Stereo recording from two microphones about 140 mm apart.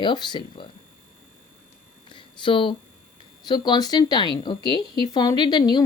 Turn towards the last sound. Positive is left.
turn(degrees=30)  # may be behind; listen again after turning